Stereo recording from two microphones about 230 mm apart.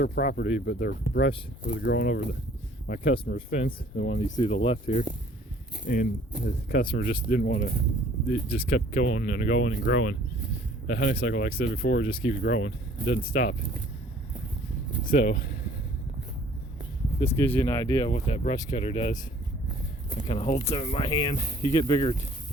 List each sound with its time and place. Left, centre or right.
0.0 s speech: left
3.5 s speech: left
15.0 s speech: left
17.2 s speech: left
20.2 s speech: left